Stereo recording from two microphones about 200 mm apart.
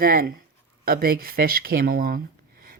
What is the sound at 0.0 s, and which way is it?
Speech, 45° right (ahead or behind).